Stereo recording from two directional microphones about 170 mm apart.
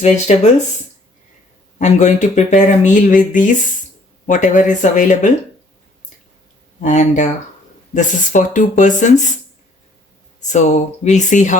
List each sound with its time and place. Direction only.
0.3 s speech: 40° left (ahead or behind)
1.8 s speech: 45° left (ahead or behind)
6.8 s speech: 45° left (ahead or behind)
10.4 s speech: 45° left (ahead or behind)